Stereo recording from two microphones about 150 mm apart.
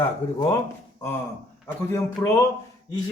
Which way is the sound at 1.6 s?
20° left (ahead or behind).